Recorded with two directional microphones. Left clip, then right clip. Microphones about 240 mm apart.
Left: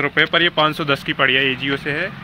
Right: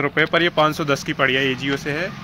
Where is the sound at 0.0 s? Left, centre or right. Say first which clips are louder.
Left 2 dB; centre.